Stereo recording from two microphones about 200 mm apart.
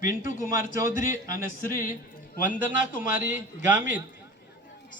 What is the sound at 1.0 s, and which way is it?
Speech, 40° left (ahead or behind).